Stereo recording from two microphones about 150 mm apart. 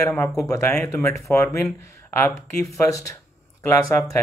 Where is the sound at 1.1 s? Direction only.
20° left (ahead or behind).